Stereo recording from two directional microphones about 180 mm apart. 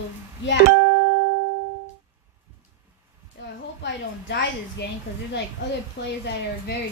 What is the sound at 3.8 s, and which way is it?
A woman's voice, 75° left (ahead or behind).